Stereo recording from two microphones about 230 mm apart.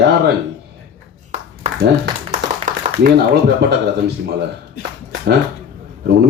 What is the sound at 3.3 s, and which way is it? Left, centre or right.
Speech, right.